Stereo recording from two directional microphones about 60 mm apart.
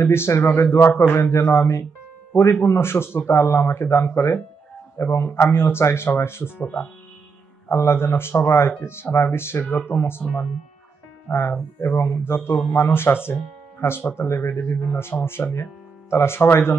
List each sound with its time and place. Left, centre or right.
0.0 s a man's voice: left
6.6 s speech: left
7.7 s a man's voice: left
11.2 s a man's voice: left